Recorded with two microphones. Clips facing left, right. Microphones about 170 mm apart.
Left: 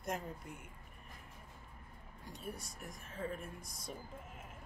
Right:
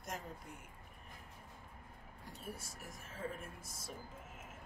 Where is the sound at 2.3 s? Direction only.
Centre (ahead or behind).